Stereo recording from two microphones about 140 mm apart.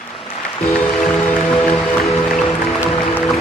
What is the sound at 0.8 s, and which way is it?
Music, 5° left (ahead or behind).